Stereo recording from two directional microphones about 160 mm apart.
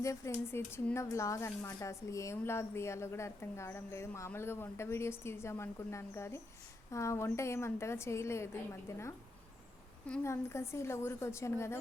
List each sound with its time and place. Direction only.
0.0 s speech: 15° left (ahead or behind)
10.2 s speech: 15° left (ahead or behind)